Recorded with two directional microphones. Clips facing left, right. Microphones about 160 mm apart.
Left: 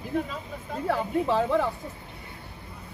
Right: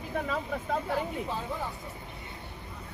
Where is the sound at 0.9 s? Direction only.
85° left.